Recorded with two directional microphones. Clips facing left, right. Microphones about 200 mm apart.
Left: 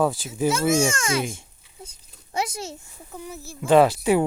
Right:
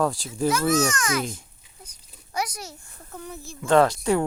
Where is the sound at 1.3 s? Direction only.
25° left (ahead or behind).